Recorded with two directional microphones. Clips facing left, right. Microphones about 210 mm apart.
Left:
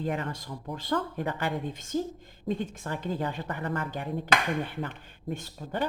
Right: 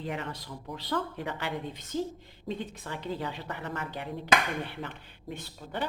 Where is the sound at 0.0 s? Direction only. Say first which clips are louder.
Left 4 dB; 50° left (ahead or behind).